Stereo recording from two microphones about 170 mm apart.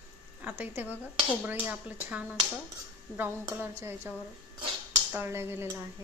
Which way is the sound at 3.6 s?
15° right (ahead or behind).